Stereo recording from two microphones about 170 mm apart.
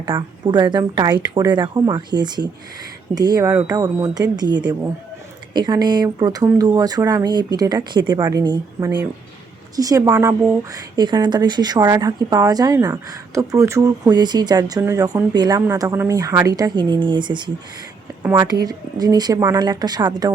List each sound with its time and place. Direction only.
0.0 s speech: 30° right (ahead or behind)
3.5 s speech: 10° right (ahead or behind)
3.8 s speech: 25° right (ahead or behind)